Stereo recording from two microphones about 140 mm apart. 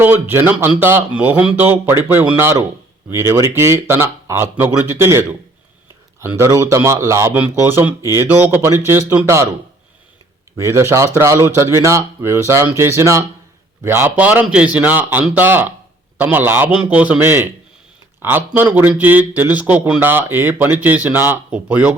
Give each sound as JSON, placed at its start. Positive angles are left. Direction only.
{"t": 0.0, "sound": "a man's voice", "side_deg": -15}
{"t": 10.6, "sound": "a man's voice", "side_deg": -20}